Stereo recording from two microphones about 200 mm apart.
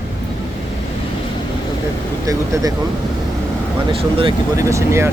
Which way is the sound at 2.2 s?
15° right (ahead or behind).